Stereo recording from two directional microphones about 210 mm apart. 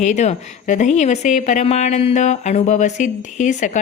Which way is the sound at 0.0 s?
35° left (ahead or behind).